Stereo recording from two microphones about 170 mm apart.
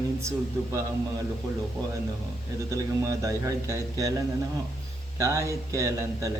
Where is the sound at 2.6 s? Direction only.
20° right (ahead or behind).